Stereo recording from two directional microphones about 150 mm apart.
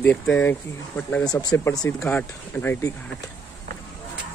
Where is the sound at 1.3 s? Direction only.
25° left (ahead or behind).